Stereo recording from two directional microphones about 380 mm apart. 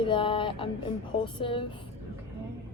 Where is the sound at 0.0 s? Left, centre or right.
Centre.